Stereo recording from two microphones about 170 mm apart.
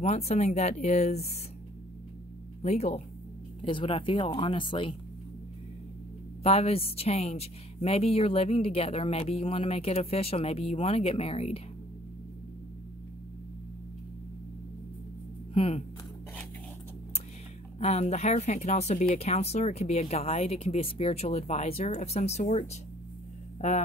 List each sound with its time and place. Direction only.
0.0 s speech: 40° left (ahead or behind)
2.6 s speech: 40° left (ahead or behind)
6.4 s speech: 35° left (ahead or behind)
15.5 s speech: 30° left (ahead or behind)
17.7 s speech: 40° left (ahead or behind)